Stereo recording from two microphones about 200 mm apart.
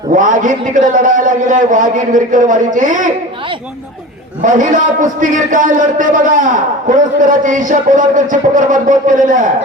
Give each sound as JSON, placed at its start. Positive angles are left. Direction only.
{"t": 0.1, "sound": "a man's voice", "side_deg": -40}
{"t": 4.4, "sound": "a man's voice", "side_deg": -40}